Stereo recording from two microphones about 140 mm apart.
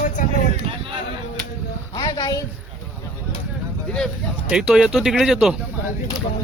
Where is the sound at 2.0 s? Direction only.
30° left (ahead or behind).